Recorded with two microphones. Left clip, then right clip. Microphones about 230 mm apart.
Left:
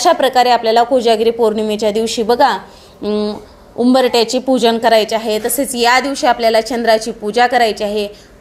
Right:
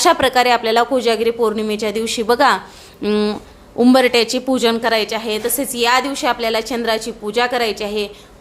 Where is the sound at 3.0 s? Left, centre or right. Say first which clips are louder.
Even; right.